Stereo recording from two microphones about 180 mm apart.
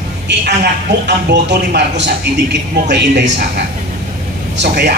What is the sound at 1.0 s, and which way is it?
A man's voice, 70° right (ahead or behind).